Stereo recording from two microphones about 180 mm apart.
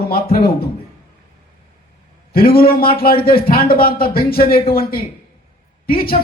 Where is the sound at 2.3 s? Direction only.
55° left (ahead or behind).